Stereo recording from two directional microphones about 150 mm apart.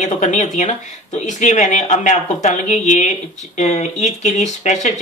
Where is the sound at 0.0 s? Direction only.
55° left (ahead or behind).